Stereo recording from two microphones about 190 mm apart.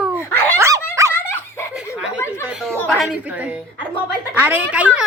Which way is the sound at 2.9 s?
Centre (ahead or behind).